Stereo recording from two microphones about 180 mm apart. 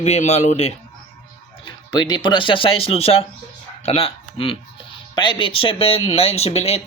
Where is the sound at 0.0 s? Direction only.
40° left (ahead or behind).